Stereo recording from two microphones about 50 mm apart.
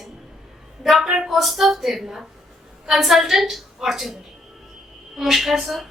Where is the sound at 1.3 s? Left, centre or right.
Centre.